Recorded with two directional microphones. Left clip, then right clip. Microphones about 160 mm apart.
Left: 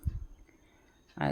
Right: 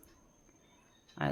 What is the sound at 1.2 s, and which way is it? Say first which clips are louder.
Speech: left 2 dB; 20° left (ahead or behind).